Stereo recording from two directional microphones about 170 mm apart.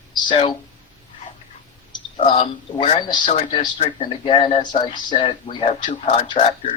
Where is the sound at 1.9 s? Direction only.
30° left (ahead or behind).